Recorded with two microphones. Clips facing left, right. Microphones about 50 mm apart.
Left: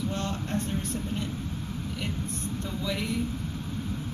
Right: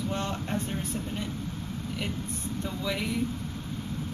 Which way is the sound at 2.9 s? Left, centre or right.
Centre.